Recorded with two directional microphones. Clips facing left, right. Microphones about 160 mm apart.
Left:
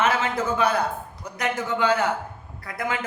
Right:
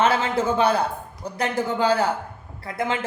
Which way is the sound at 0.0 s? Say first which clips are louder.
Right 3 dB; 30° right (ahead or behind).